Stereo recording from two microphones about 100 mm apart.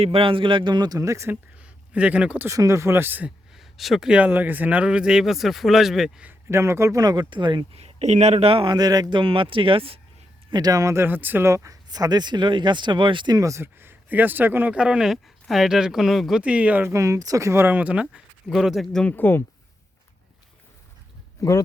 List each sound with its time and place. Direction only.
0.0 s a man's voice: 70° right (ahead or behind); by 1.4 s 30° right (ahead or behind)
1.6 s speech: 15° right (ahead or behind)
2.5 s speech: 30° right (ahead or behind)
3.5 s speech: centre (ahead or behind)
6.5 s speech: 25° right (ahead or behind); by 7.6 s 50° right (ahead or behind)
7.7 s speech: 85° right; by 8.7 s 65° right (ahead or behind)
8.7 s speech: 40° right (ahead or behind); by 10.0 s 65° right (ahead or behind)
10.5 s speech: 40° right (ahead or behind)
13.3 s speech: 30° right (ahead or behind)
14.8 s speech: 10° right (ahead or behind)
16.4 s speech: 15° right (ahead or behind)
16.9 s speech: 35° right (ahead or behind); by 19.0 s centre (ahead or behind)
19.0 s speech: 20° left (ahead or behind)
21.4 s speech: 35° left (ahead or behind)